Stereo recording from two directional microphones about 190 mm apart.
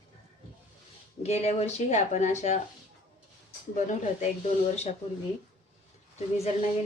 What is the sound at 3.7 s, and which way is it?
Speech, 40° left (ahead or behind).